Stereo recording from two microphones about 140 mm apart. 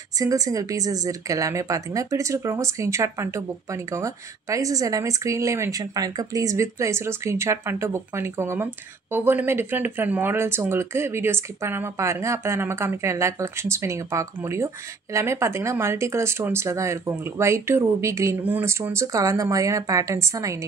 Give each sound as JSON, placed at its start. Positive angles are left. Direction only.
{"t": 0.2, "sound": "speech", "side_deg": -25}